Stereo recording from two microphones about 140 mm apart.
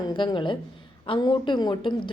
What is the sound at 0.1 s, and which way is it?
A woman's voice, 35° left (ahead or behind).